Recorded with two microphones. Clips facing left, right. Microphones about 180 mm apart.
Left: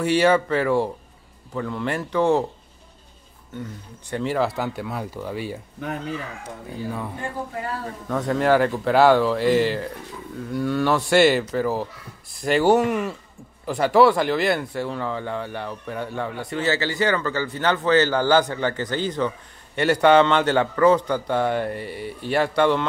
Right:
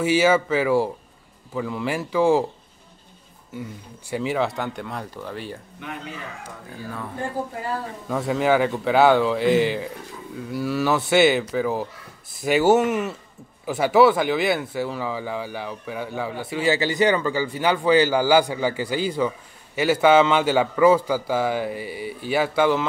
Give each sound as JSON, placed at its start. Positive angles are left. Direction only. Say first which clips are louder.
{"t": 0.0, "sound": "speech", "louder": "even", "side_deg": -5}
{"t": 4.1, "sound": "speech", "louder": "left 1 dB", "side_deg": -5}
{"t": 5.8, "sound": "speech", "louder": "left 6 dB", "side_deg": 40}
{"t": 6.7, "sound": "speech", "louder": "left 4 dB", "side_deg": 15}
{"t": 8.1, "sound": "speech", "louder": "left 1 dB", "side_deg": -5}